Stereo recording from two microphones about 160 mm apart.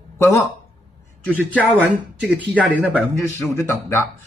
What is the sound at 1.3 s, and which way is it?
Speech, 10° right (ahead or behind).